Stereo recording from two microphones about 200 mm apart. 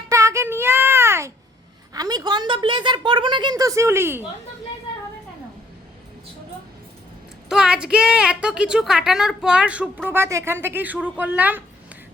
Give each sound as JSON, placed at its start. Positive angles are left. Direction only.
{"t": 0.1, "sound": "a sound", "side_deg": -15}
{"t": 1.9, "sound": "a woman's voice", "side_deg": -20}
{"t": 7.5, "sound": "a woman's voice", "side_deg": -5}